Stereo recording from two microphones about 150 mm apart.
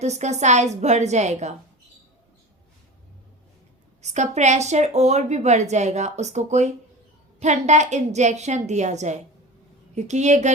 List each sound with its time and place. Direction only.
0.0 s a woman's voice: 50° right (ahead or behind)
4.0 s a woman's voice: 50° right (ahead or behind)